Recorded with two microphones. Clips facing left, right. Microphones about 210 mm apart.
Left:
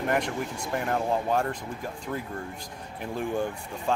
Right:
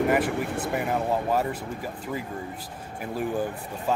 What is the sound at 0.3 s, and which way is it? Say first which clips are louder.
Speech: right 4 dB; 60° right (ahead or behind).